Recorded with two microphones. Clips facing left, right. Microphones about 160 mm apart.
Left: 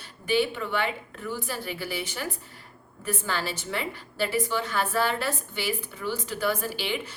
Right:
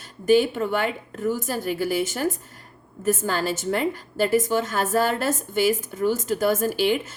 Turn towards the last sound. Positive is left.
turn(degrees=-45)  # may be behind; listen again after turning